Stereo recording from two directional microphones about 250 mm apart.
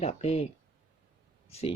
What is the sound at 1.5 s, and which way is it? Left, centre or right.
Speech, left.